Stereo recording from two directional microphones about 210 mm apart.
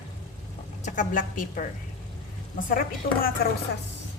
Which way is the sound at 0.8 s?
35° left (ahead or behind).